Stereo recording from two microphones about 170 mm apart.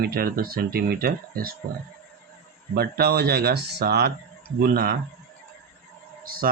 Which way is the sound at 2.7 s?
65° right (ahead or behind).